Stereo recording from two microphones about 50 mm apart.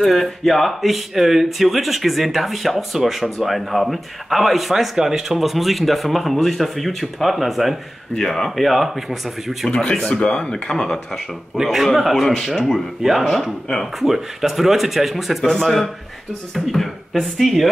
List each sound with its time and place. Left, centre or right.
0.0 s speech: centre
9.7 s speech: centre
9.9 s speech: centre
10.2 s speech: centre
11.6 s speech: centre